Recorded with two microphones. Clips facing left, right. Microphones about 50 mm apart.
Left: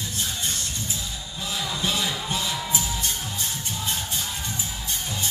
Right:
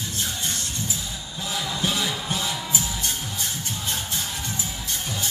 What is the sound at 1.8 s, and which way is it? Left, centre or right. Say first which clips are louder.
Music: right 1 dB; right.